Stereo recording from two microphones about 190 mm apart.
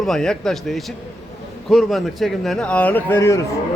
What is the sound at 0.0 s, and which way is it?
Speech, 5° left (ahead or behind).